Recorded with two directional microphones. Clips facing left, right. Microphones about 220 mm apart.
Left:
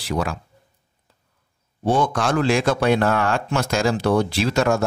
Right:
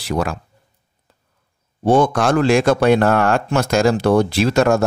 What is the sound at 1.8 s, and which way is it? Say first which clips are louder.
A man's voice: right 5 dB; 50° right (ahead or behind).